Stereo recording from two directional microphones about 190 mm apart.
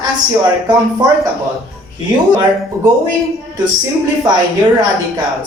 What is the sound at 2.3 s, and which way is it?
Speech, 20° right (ahead or behind).